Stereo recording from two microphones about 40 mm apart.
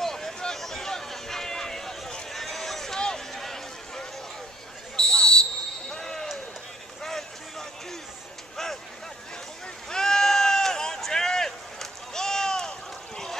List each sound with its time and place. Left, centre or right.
0.0 s a sound: centre
4.9 s basketball bounce: centre
7.0 s vehicle: centre
9.8 s sheep: centre